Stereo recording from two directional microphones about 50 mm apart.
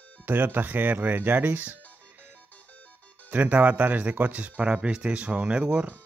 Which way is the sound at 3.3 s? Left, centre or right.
Right.